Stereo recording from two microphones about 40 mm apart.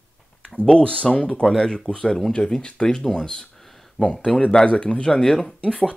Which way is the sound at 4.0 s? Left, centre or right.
Left.